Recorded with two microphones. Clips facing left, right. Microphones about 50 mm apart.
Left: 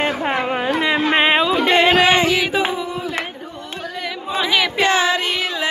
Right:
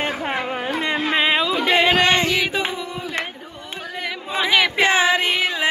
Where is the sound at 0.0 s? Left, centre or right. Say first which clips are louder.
Left 4 dB; left.